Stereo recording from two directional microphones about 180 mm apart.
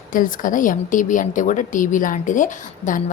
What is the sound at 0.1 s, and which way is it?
A woman's voice, 50° left (ahead or behind).